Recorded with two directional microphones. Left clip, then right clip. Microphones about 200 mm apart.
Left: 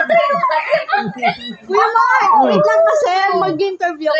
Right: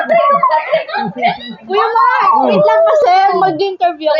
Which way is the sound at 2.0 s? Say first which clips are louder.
Right 1 dB; 15° left (ahead or behind).